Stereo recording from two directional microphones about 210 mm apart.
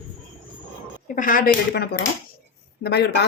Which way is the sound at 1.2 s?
40° left (ahead or behind).